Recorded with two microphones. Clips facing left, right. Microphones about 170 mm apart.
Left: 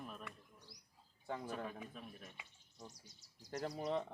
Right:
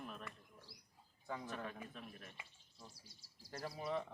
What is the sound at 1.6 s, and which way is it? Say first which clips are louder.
Speech: left 1 dB; 5° left (ahead or behind).